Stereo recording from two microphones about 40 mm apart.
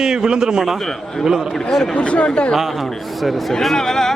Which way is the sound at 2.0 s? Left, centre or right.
Left.